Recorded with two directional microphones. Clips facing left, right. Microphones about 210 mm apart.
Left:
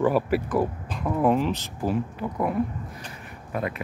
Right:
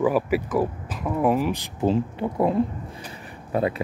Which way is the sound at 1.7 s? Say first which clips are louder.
Right 4 dB; 25° right (ahead or behind).